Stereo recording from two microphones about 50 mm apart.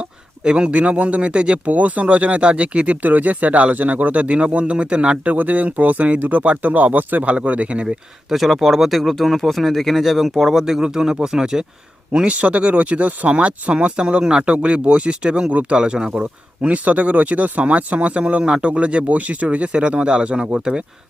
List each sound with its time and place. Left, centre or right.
0.0 s a man's voice: centre
8.3 s speech: centre
12.1 s a man's voice: right